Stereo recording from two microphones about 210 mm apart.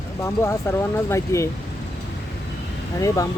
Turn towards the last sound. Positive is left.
turn(degrees=15)  # may be behind; listen again after turning